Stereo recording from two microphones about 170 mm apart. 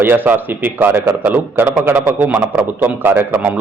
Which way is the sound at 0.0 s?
10° right (ahead or behind).